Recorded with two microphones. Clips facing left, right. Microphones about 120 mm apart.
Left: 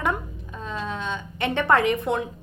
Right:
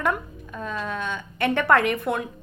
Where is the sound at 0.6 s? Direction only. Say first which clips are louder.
Right 1 dB; 20° left (ahead or behind).